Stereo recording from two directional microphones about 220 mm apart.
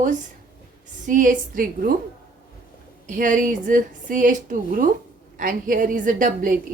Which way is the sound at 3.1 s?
35° right (ahead or behind).